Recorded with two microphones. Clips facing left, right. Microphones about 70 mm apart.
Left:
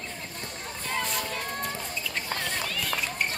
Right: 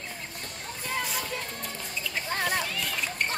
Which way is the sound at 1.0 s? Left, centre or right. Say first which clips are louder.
Left 2 dB; centre.